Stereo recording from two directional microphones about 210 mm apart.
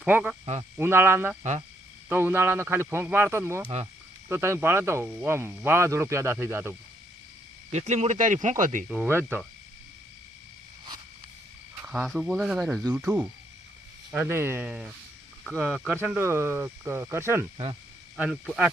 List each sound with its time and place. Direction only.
0.0 s speech: 5° right (ahead or behind)
7.7 s speech: 35° right (ahead or behind)
8.9 s speech: 10° right (ahead or behind)
11.9 s speech: centre (ahead or behind)